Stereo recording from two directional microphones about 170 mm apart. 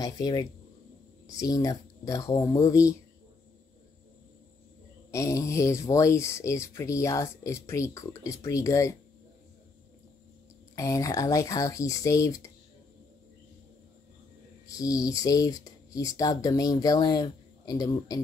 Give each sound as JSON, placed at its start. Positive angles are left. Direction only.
{"t": 0.0, "sound": "speech", "side_deg": 20}
{"t": 5.1, "sound": "speech", "side_deg": 15}
{"t": 10.8, "sound": "speech", "side_deg": 20}
{"t": 14.7, "sound": "speech", "side_deg": 20}